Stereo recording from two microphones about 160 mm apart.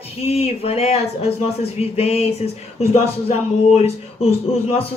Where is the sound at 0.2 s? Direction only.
40° left (ahead or behind).